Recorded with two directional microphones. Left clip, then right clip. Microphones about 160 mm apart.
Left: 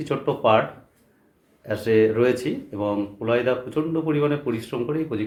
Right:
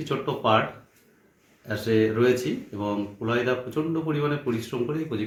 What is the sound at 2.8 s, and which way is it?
Speech, 25° left (ahead or behind).